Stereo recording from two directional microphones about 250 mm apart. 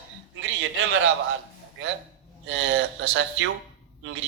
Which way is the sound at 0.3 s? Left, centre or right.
Right.